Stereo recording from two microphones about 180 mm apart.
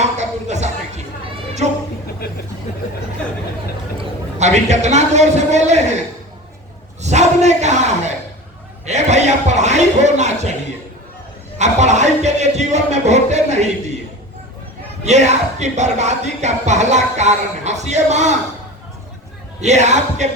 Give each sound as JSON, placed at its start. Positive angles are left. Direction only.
{"t": 0.0, "sound": "a sound", "side_deg": -40}
{"t": 4.4, "sound": "speech", "side_deg": -40}
{"t": 7.0, "sound": "speech", "side_deg": -40}
{"t": 8.9, "sound": "a sound", "side_deg": -40}
{"t": 11.5, "sound": "music", "side_deg": -40}
{"t": 15.0, "sound": "speech", "side_deg": -40}
{"t": 19.6, "sound": "speech", "side_deg": -40}